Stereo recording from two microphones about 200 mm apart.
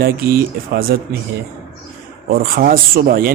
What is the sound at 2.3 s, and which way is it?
Speech, 50° right (ahead or behind).